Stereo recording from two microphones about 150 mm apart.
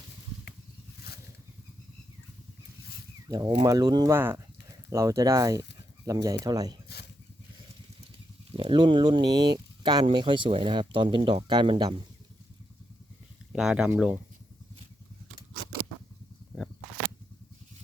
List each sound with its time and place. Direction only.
3.2 s speech: 25° right (ahead or behind)
8.5 s speech: 35° right (ahead or behind)
13.5 s speech: 5° right (ahead or behind)